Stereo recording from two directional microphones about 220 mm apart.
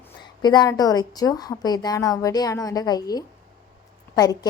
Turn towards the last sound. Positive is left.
turn(degrees=15)  # may be behind; listen again after turning